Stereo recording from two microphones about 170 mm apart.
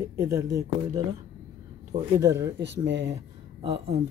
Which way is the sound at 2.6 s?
90° right.